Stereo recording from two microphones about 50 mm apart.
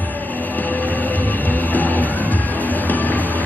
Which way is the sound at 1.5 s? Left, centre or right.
Left.